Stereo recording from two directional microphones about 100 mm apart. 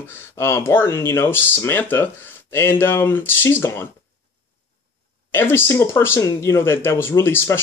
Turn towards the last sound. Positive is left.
turn(degrees=25)  # may be behind; listen again after turning